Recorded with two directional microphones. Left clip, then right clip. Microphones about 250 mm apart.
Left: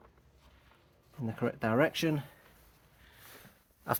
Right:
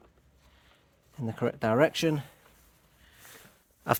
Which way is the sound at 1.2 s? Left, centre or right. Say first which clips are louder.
Right 4 dB; right.